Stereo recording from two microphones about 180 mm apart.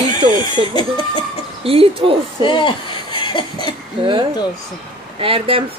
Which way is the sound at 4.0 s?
25° right (ahead or behind).